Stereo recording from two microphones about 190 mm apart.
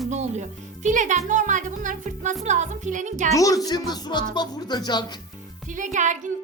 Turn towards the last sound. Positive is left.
turn(degrees=-40)  # may be behind; listen again after turning